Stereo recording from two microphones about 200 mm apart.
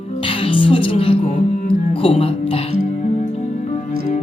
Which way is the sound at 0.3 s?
25° left (ahead or behind).